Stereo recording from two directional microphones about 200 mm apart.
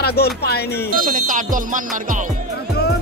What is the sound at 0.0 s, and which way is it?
Speech, 55° left (ahead or behind).